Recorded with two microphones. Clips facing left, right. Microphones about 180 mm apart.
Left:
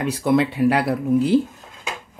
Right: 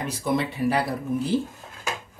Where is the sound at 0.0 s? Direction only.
70° left (ahead or behind).